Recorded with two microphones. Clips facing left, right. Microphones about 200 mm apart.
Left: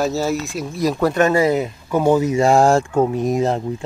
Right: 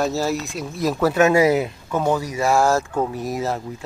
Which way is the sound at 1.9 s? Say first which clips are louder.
Left 8 dB; 15° left (ahead or behind).